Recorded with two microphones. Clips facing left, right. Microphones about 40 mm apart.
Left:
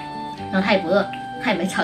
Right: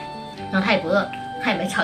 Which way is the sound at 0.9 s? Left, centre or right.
Centre.